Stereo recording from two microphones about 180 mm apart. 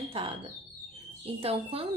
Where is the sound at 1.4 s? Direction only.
35° right (ahead or behind).